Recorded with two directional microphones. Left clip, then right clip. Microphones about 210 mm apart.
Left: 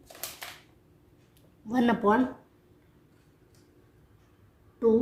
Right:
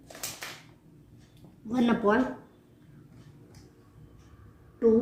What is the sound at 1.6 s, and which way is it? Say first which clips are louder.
Speech: left 1 dB; 50° left (ahead or behind).